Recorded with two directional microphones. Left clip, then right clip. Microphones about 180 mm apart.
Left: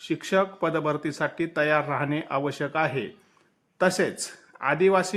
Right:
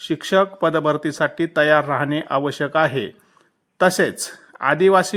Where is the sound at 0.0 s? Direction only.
30° right (ahead or behind).